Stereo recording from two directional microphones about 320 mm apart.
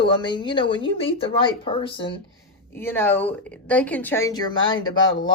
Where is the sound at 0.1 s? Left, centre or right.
Centre.